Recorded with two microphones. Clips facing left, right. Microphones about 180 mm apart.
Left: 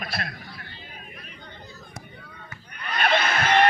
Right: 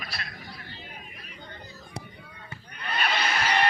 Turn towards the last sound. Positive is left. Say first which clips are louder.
# left 5 dB
turn(degrees=55)  # may be behind; listen again after turning